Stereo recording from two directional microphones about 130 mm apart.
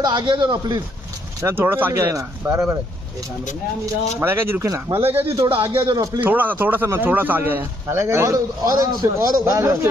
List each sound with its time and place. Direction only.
0.0 s a man's voice: 35° right (ahead or behind)
1.4 s speech: 20° right (ahead or behind)
3.8 s speech: 20° right (ahead or behind)
5.5 s a man's voice: 40° right (ahead or behind)
6.2 s a man's voice: 15° right (ahead or behind)